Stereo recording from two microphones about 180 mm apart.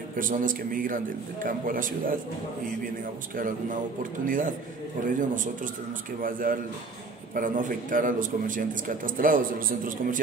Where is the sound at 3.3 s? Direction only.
50° right (ahead or behind).